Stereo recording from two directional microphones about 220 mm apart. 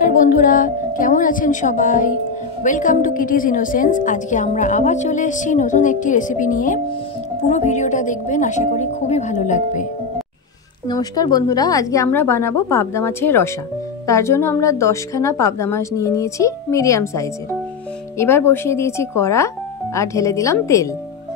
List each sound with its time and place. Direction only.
0.0 s a woman's voice: 35° left (ahead or behind)
10.9 s a woman's voice: 15° left (ahead or behind)